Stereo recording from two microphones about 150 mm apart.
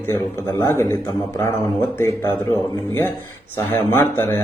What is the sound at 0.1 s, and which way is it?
Speech, 20° left (ahead or behind).